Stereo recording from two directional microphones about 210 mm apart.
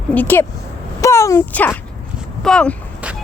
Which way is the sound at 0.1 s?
10° left (ahead or behind).